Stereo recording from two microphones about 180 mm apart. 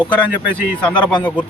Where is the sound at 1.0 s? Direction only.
25° left (ahead or behind).